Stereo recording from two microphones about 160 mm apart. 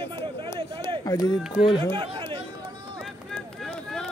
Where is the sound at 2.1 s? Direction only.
35° right (ahead or behind).